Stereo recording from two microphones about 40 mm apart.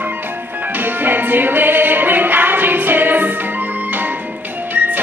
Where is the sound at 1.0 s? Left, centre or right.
Right.